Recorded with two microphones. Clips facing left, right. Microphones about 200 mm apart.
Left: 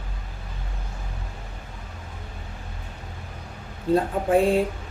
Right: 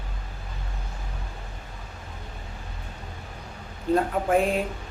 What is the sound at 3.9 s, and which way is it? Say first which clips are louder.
Speech: left 2 dB; 30° left (ahead or behind).